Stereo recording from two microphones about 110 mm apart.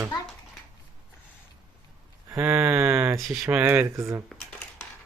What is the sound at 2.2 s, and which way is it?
Speech, 20° right (ahead or behind).